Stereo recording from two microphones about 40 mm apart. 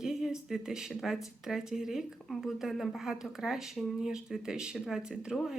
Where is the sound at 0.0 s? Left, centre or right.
Centre.